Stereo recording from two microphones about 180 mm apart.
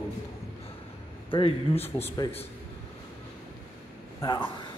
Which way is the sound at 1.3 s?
30° left (ahead or behind).